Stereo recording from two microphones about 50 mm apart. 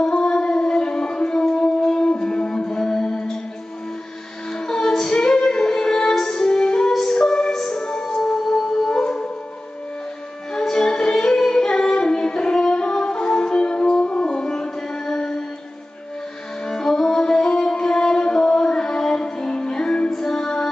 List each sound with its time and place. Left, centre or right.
0.0 s a sound: centre
4.6 s music: centre
10.7 s music: centre
16.6 s music: centre